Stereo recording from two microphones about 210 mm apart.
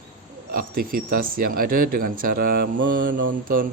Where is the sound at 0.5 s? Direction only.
45° right (ahead or behind).